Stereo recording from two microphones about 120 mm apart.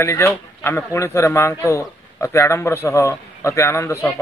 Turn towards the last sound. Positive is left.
turn(degrees=25)  # may be behind; listen again after turning